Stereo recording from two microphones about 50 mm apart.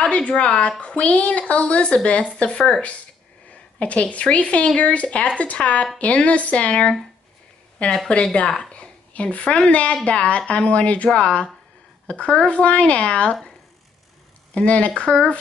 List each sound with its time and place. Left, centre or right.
0.0 s a woman's voice: left
8.1 s a woman's voice: left
14.5 s a woman's voice: left